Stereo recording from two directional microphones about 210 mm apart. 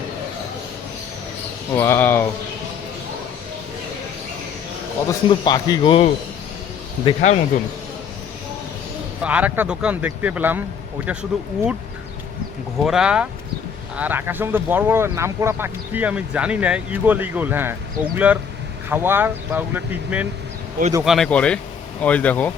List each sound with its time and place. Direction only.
1.7 s speech: 10° left (ahead or behind)
5.3 s speech: 20° left (ahead or behind)
9.2 s speech: 5° right (ahead or behind)
12.8 s speech: 5° right (ahead or behind)